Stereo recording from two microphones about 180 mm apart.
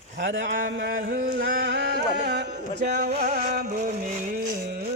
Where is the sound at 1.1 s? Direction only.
50° right (ahead or behind); by 2.4 s 70° right (ahead or behind).